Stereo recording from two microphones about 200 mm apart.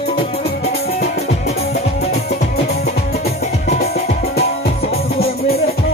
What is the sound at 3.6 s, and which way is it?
Music, 35° left (ahead or behind).